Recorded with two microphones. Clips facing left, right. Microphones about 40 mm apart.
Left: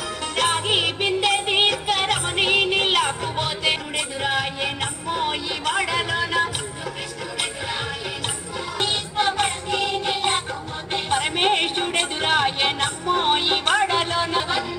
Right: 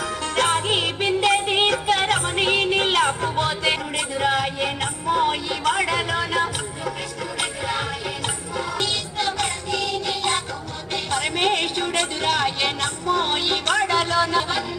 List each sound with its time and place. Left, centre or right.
0.4 s music: left
4.2 s music: centre
8.7 s music: left